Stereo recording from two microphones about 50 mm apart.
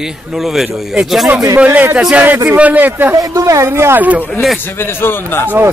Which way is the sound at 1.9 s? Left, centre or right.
Right.